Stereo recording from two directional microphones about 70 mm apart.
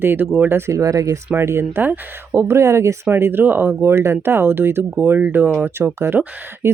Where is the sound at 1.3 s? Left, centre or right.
Right.